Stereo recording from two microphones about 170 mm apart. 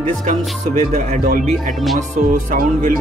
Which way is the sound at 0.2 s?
45° right (ahead or behind).